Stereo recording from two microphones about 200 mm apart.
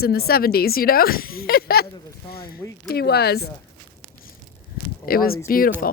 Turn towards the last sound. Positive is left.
turn(degrees=45)  # may be behind; listen again after turning